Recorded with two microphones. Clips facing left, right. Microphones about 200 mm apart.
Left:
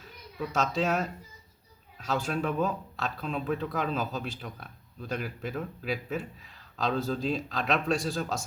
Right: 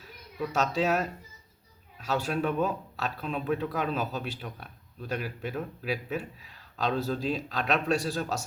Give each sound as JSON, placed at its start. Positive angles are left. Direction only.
{"t": 0.0, "sound": "speech", "side_deg": -5}